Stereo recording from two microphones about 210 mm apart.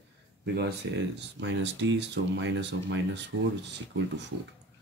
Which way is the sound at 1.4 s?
60° right (ahead or behind).